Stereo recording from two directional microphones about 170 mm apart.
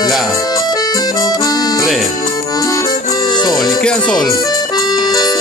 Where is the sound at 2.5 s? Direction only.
20° left (ahead or behind).